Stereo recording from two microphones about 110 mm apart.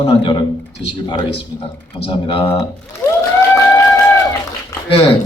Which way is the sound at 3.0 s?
25° left (ahead or behind).